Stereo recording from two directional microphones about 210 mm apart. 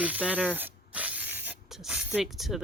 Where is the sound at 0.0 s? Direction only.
5° right (ahead or behind).